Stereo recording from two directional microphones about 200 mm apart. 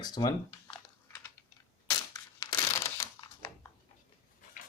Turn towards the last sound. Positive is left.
turn(degrees=15)  # may be behind; listen again after turning